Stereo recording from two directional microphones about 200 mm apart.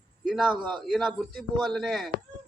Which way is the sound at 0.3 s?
Centre (ahead or behind).